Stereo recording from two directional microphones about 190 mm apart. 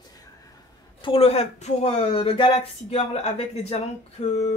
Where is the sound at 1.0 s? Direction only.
30° left (ahead or behind).